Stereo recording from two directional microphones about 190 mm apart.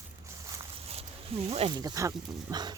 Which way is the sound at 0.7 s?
30° right (ahead or behind).